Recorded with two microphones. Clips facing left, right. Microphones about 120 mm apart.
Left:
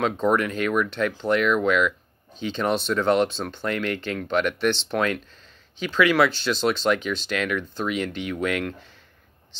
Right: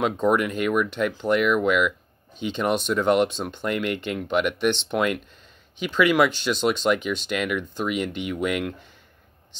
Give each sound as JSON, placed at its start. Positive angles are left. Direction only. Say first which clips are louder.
{"t": 0.0, "sound": "speech", "louder": "even", "side_deg": -10}